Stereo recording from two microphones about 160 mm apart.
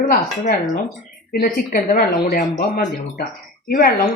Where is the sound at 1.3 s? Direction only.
65° left (ahead or behind).